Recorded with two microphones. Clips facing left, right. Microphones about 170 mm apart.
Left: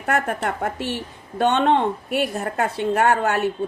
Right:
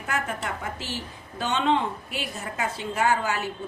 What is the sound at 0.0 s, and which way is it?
A woman's voice, 60° left (ahead or behind).